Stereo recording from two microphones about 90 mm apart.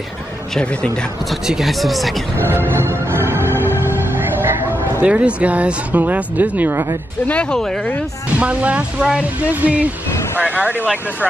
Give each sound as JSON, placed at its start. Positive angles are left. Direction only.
{"t": 0.6, "sound": "speech", "side_deg": 10}
{"t": 1.3, "sound": "speech", "side_deg": -5}
{"t": 2.3, "sound": "music", "side_deg": -25}
{"t": 5.0, "sound": "speech", "side_deg": -15}
{"t": 7.2, "sound": "speech", "side_deg": 10}
{"t": 8.4, "sound": "speech", "side_deg": -15}